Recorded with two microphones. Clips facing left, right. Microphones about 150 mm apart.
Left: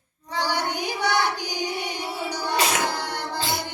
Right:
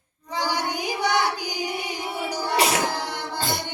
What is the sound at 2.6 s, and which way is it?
Music, 30° right (ahead or behind).